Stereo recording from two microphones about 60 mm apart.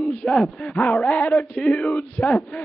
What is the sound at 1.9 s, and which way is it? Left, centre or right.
Speech, left.